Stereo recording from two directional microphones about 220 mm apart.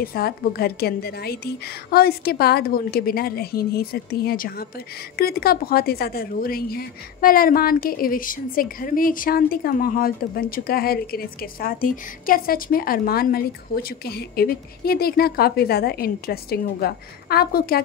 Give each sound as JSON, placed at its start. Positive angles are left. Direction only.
{"t": 0.0, "sound": "a woman's voice", "side_deg": 45}